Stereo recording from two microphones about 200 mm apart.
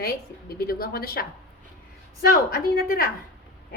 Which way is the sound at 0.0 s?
50° left (ahead or behind).